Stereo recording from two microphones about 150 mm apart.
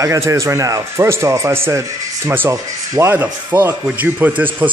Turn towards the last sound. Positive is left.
turn(degrees=-10)  # may be behind; listen again after turning